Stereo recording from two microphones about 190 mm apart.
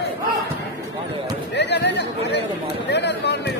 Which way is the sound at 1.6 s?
65° left (ahead or behind).